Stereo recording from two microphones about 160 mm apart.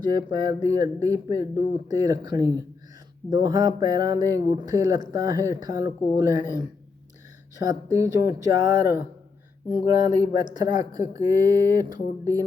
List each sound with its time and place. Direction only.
0.0 s speech: 25° right (ahead or behind)
11.9 s speech: 60° left (ahead or behind)